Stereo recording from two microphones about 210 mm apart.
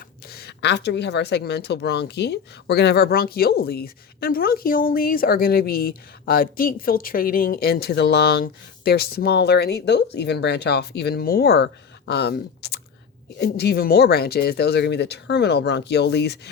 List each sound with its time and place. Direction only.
0.3 s speech: 50° left (ahead or behind)